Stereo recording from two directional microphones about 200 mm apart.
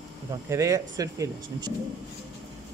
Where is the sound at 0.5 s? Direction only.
15° right (ahead or behind).